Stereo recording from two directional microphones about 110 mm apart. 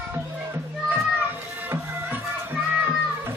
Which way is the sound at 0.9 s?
15° right (ahead or behind).